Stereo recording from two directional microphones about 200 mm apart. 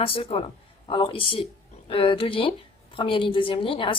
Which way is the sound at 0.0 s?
30° left (ahead or behind).